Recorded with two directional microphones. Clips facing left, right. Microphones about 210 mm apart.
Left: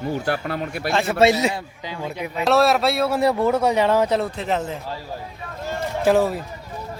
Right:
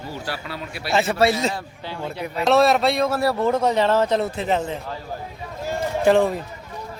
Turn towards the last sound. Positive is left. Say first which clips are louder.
# right 1 dB
turn(degrees=5)  # may be behind; listen again after turning